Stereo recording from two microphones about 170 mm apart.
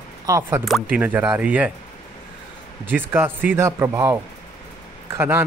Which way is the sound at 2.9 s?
10° right (ahead or behind).